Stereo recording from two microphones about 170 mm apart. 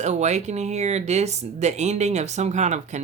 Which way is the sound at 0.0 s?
40° right (ahead or behind).